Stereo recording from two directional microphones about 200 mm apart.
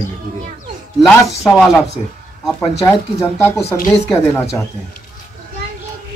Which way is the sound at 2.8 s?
15° left (ahead or behind).